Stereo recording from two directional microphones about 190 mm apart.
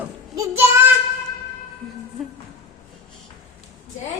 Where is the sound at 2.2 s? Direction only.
Centre (ahead or behind).